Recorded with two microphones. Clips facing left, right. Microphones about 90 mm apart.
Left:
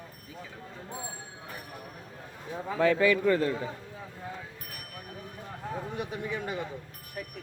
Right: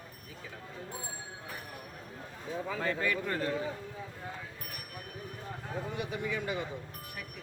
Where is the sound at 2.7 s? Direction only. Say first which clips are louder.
Left 11 dB; 90° left.